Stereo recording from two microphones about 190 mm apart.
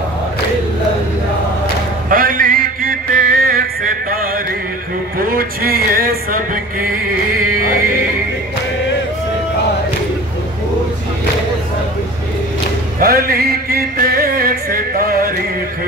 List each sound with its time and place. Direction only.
2.0 s mantra: 45° right (ahead or behind)
5.2 s music: 50° right (ahead or behind)
13.0 s music: 50° right (ahead or behind)